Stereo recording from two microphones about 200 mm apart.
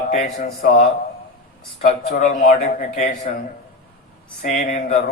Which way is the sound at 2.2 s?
35° left (ahead or behind).